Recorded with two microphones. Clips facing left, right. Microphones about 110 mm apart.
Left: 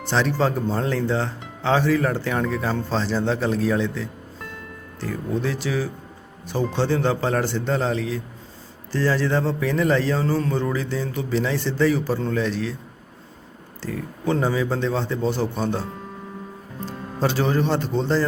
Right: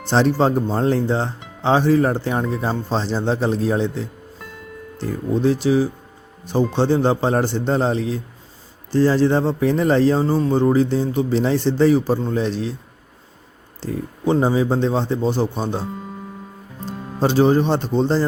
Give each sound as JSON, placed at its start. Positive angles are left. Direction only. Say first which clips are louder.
{"t": 0.1, "sound": "a man's voice", "louder": "right 5 dB", "side_deg": -30}
{"t": 13.8, "sound": "a man's voice", "louder": "right 4 dB", "side_deg": -20}
{"t": 17.2, "sound": "a man's voice", "louder": "right 6 dB", "side_deg": -25}